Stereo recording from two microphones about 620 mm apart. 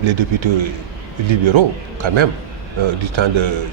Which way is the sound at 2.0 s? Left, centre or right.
Right.